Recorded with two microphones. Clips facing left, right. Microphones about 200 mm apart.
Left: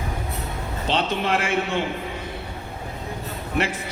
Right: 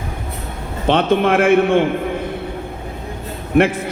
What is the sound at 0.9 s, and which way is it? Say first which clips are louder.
A man's voice: right 9 dB; 55° right (ahead or behind).